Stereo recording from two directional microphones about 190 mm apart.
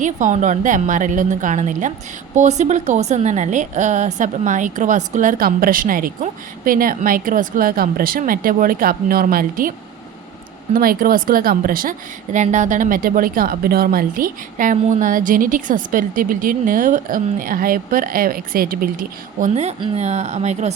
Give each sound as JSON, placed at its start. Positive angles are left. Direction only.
{"t": 0.0, "sound": "a woman's voice", "side_deg": -40}
{"t": 10.8, "sound": "a woman's voice", "side_deg": -50}